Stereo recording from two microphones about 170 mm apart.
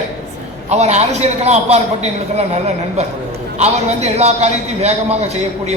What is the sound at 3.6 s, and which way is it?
A man's voice, 40° right (ahead or behind).